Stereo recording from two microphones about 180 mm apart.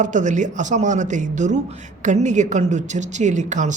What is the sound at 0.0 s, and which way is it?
A man's voice, 45° right (ahead or behind).